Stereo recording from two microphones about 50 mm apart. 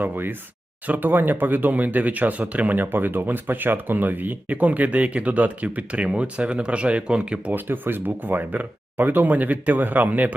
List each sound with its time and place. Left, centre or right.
0.0 s speech: right
7.5 s speech: right